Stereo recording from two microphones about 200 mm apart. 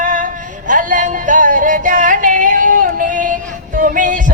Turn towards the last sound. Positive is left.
turn(degrees=-40)  # may be behind; listen again after turning